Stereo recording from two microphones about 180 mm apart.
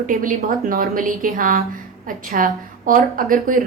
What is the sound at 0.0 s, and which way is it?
A woman's voice, 50° right (ahead or behind).